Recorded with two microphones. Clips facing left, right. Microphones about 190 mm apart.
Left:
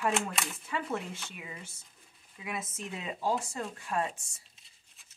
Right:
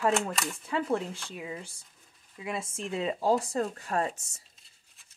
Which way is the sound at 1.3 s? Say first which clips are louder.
Right 7 dB; 30° right (ahead or behind).